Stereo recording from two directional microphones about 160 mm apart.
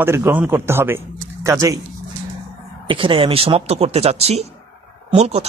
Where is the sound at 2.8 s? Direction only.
30° right (ahead or behind).